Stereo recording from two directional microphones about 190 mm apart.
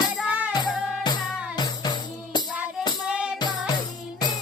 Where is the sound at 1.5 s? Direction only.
20° left (ahead or behind).